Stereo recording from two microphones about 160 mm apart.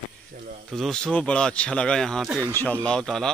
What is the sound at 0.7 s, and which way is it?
Speech, 5° left (ahead or behind).